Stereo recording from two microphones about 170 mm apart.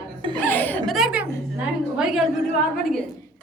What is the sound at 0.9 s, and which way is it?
A man's voice, 5° right (ahead or behind).